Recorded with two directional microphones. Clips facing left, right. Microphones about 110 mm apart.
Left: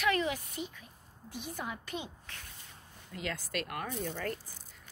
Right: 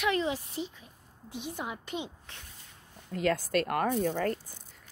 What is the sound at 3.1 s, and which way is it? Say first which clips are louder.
Speech: right 10 dB; 45° right (ahead or behind).